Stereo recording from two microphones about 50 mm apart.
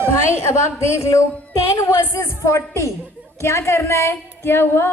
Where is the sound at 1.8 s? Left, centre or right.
Left.